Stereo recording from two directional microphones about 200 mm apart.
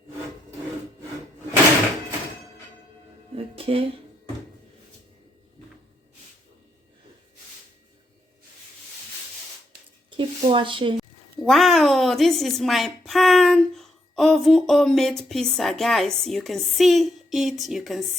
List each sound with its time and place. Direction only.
3.3 s music: 30° right (ahead or behind)
10.1 s a sound: 25° right (ahead or behind)
11.4 s a woman's voice: centre (ahead or behind)